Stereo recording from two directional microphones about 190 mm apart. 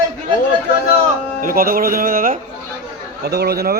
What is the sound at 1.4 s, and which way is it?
Speech, 50° right (ahead or behind).